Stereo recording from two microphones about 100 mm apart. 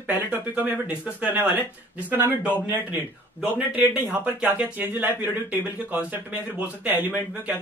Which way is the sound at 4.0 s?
15° right (ahead or behind).